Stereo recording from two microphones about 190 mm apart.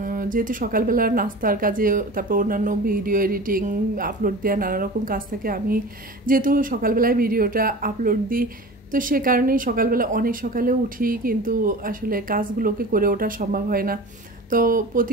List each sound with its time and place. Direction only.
0.0 s speech: 45° right (ahead or behind)